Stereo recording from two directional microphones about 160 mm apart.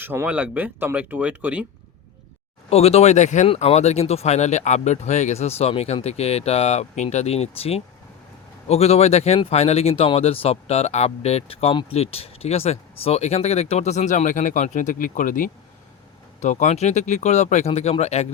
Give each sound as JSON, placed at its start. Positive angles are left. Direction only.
{"t": 0.0, "sound": "speech", "side_deg": -15}
{"t": 2.6, "sound": "speech", "side_deg": 40}